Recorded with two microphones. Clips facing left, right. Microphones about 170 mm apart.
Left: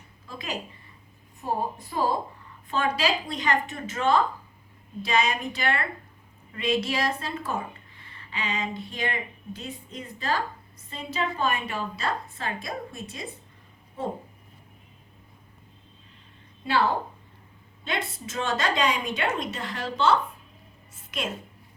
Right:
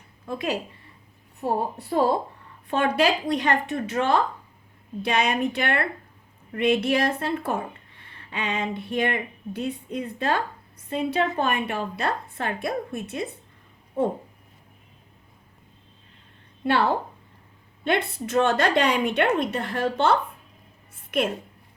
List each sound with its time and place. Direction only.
0.3 s a woman's voice: 60° right (ahead or behind)
16.6 s a woman's voice: 60° right (ahead or behind)
17.8 s a woman's voice: 60° right (ahead or behind)
20.9 s a sound: 55° right (ahead or behind)